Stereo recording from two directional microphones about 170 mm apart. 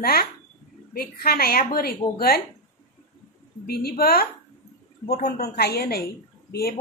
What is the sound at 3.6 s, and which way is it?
A woman's voice, 65° left (ahead or behind).